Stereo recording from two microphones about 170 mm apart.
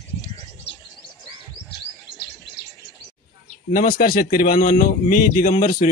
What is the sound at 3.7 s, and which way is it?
Speech, 55° left (ahead or behind).